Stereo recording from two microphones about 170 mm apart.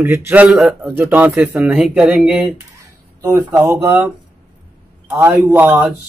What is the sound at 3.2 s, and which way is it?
Speech, 20° right (ahead or behind).